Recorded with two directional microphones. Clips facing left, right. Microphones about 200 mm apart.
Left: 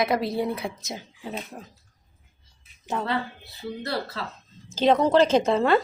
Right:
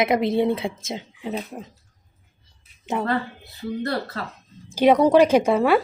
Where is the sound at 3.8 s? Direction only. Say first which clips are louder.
Right 2 dB; 50° right (ahead or behind).